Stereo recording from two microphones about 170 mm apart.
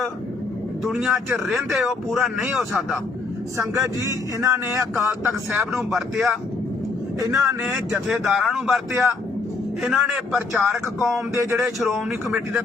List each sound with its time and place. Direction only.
0.9 s speech: centre (ahead or behind)
3.6 s speech: 15° right (ahead or behind); by 6.3 s centre (ahead or behind)
7.3 s speech: 20° right (ahead or behind)
7.6 s speech: 5° right (ahead or behind)
11.0 s speech: 15° right (ahead or behind)
11.5 s speech: centre (ahead or behind)